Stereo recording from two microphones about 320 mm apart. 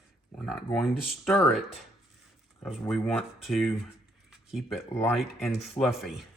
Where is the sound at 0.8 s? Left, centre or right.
Centre.